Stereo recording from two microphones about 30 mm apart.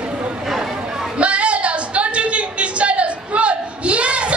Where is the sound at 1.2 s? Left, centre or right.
Right.